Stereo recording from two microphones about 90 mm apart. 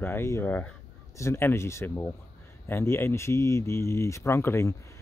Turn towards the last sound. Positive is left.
turn(degrees=30)  # may be behind; listen again after turning